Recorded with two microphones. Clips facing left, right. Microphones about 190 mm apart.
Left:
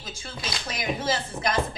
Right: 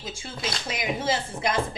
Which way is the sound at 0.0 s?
25° right (ahead or behind).